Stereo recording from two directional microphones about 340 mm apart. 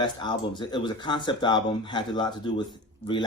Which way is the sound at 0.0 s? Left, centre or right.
Centre.